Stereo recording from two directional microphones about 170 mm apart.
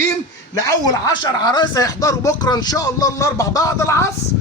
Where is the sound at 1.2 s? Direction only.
25° left (ahead or behind).